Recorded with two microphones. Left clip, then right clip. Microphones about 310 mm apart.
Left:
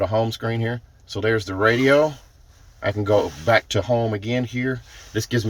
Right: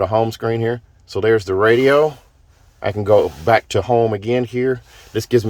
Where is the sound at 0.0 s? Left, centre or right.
Centre.